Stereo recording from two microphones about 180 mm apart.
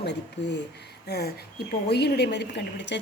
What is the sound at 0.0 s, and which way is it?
Speech, 70° left (ahead or behind).